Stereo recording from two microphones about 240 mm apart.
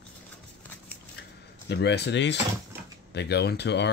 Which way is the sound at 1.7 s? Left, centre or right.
Left.